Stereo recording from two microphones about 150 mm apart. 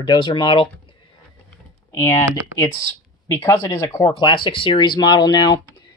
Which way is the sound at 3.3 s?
15° left (ahead or behind).